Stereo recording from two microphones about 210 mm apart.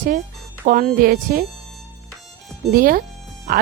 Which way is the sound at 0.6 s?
40° right (ahead or behind).